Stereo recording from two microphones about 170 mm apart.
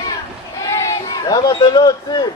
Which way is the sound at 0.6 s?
20° left (ahead or behind).